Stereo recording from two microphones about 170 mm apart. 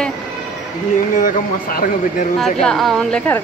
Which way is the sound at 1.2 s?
55° left (ahead or behind).